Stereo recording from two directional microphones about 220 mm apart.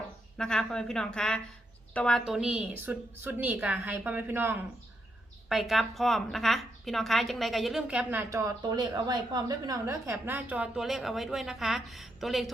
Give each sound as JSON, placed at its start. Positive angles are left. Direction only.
{"t": 0.3, "sound": "a woman's voice", "side_deg": 5}